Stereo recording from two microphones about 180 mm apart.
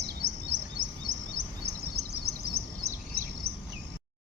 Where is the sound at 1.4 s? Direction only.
80° right.